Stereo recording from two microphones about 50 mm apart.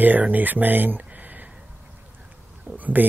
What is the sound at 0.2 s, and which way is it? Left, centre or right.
Speech, right.